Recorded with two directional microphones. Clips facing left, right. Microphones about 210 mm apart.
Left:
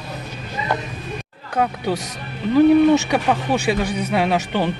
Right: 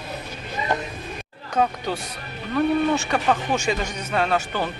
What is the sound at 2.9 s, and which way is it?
Speech, 10° left (ahead or behind).